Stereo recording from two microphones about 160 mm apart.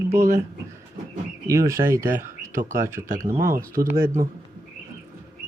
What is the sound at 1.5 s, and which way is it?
Speech, 20° right (ahead or behind).